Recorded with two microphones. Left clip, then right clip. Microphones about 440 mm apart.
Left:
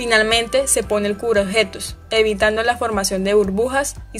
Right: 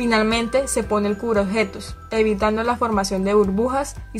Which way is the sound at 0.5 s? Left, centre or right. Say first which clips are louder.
Left 2 dB; centre.